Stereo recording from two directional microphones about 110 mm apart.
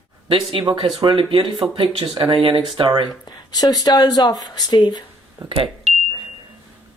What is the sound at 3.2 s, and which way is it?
Speech, 35° left (ahead or behind).